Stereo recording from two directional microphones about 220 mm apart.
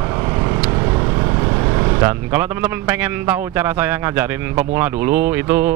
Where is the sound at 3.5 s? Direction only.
10° right (ahead or behind).